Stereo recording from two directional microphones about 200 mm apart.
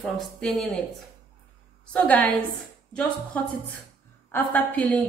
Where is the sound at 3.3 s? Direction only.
5° left (ahead or behind).